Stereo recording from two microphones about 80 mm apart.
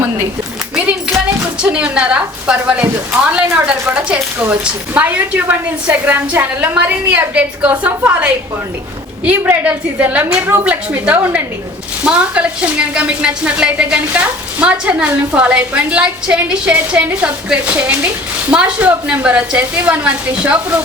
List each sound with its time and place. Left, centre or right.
1.6 s a woman's voice: centre